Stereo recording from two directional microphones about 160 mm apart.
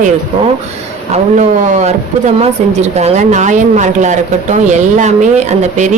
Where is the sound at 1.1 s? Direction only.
45° right (ahead or behind).